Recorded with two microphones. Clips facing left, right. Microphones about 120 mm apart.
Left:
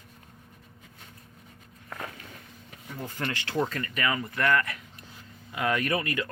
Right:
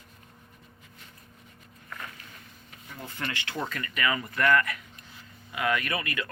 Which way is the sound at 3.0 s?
40° left (ahead or behind).